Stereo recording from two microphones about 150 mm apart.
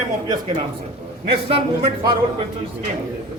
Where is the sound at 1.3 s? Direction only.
40° right (ahead or behind).